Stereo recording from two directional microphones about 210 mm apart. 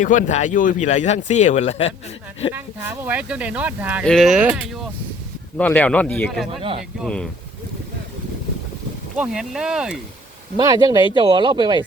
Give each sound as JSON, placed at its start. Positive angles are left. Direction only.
{"t": 0.0, "sound": "speech", "side_deg": 35}
{"t": 2.6, "sound": "speech", "side_deg": -10}
{"t": 6.6, "sound": "speech", "side_deg": -25}
{"t": 7.0, "sound": "speech", "side_deg": 5}
{"t": 9.1, "sound": "speech", "side_deg": -5}
{"t": 10.6, "sound": "speech", "side_deg": -15}